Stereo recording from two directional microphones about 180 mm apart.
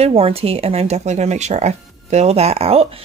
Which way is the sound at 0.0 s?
35° right (ahead or behind).